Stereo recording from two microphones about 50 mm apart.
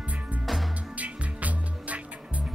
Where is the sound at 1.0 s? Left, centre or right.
Right.